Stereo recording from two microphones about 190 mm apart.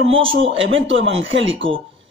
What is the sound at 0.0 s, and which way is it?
Speech, 90° right.